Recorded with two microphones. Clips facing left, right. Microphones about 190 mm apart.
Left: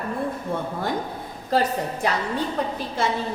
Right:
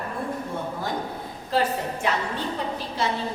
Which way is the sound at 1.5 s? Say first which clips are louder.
Left 2 dB; 40° left (ahead or behind).